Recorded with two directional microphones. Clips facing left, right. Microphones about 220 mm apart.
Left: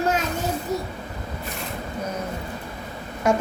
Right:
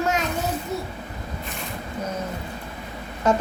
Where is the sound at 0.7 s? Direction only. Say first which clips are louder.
Left 2 dB; 35° left (ahead or behind).